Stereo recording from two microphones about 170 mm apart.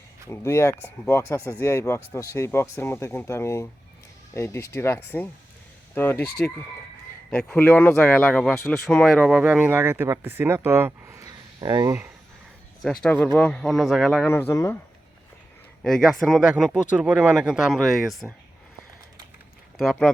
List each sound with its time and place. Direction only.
0.3 s speech: 15° left (ahead or behind)
7.3 s speech: 5° left (ahead or behind); by 11.9 s 25° right (ahead or behind)
12.8 s speech: centre (ahead or behind)
14.3 s speech: 15° left (ahead or behind)
15.8 s speech: centre (ahead or behind)
19.8 s speech: centre (ahead or behind)